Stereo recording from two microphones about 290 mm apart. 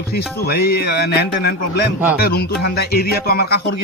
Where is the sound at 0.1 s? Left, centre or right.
Left.